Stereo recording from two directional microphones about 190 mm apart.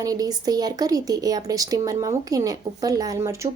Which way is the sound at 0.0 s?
20° right (ahead or behind).